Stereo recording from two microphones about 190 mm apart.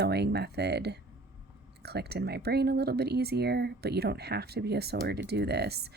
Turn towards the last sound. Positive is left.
turn(degrees=-60)  # may be behind; listen again after turning